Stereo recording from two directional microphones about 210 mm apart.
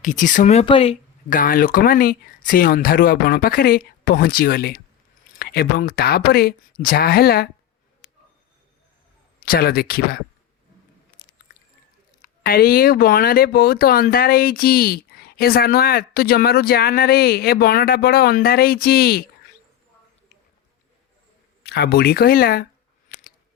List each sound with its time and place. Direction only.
0.0 s speech: 35° left (ahead or behind)
1.3 s speech: 40° left (ahead or behind)
9.4 s speech: 45° left (ahead or behind)
12.2 s speech: 45° left (ahead or behind)
21.6 s speech: 50° left (ahead or behind)